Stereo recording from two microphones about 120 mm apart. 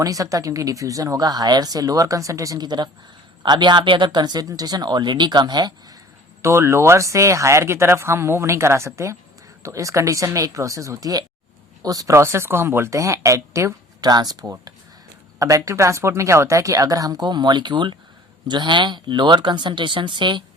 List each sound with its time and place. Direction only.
0.0 s speech: 30° right (ahead or behind)
6.4 s speech: 25° right (ahead or behind); by 20.4 s 40° right (ahead or behind)